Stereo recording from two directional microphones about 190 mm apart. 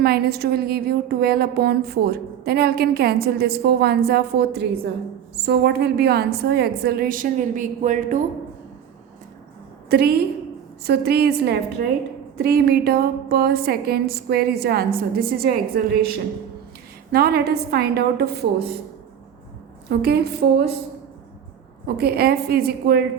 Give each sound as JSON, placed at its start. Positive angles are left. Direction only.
{"t": 0.0, "sound": "speech", "side_deg": -55}
{"t": 9.9, "sound": "a woman's voice", "side_deg": -55}
{"t": 19.9, "sound": "speech", "side_deg": -55}
{"t": 21.8, "sound": "speech", "side_deg": -55}